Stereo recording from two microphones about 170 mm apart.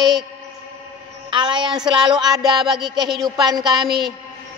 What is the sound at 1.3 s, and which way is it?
Speech, 25° right (ahead or behind).